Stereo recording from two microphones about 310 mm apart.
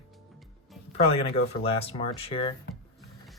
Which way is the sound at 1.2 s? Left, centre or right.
Centre.